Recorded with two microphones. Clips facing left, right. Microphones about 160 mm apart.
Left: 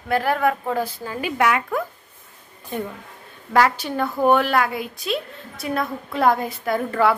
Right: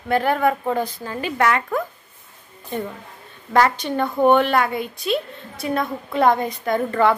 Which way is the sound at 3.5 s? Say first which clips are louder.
Right 1 dB; 5° left (ahead or behind).